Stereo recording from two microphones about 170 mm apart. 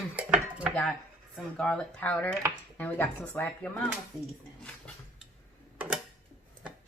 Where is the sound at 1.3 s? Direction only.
5° left (ahead or behind).